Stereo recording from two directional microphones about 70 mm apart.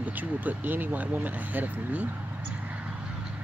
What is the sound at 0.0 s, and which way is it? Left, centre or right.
Speech, right.